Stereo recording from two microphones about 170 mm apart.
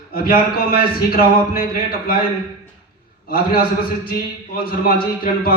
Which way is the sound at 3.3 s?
60° left (ahead or behind).